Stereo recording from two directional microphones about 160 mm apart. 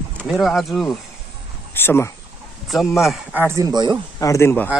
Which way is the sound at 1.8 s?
15° left (ahead or behind).